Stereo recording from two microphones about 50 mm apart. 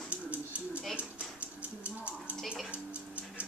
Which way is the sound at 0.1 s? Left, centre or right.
Right.